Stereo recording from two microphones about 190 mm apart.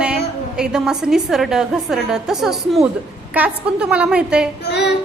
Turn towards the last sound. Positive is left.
turn(degrees=65)  # may be behind; listen again after turning